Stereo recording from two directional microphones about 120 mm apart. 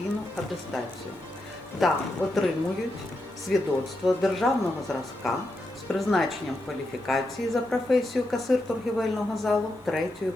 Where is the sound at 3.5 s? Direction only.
Centre (ahead or behind).